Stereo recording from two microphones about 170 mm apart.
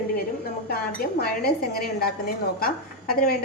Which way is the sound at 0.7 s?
65° left (ahead or behind).